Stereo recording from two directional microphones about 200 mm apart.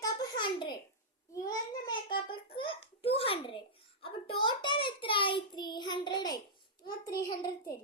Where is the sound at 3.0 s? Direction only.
30° left (ahead or behind).